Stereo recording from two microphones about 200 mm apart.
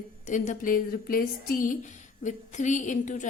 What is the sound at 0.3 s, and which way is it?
Speech, 40° left (ahead or behind).